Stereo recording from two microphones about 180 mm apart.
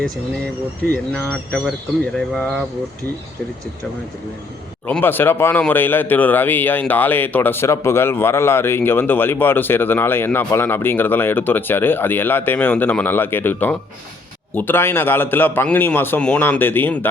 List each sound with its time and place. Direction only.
0.9 s speech: 5° left (ahead or behind)
4.9 s speech: 10° left (ahead or behind)